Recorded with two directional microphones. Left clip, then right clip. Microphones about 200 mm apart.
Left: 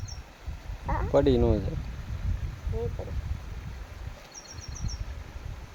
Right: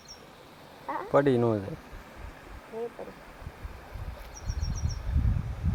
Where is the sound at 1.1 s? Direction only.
10° left (ahead or behind).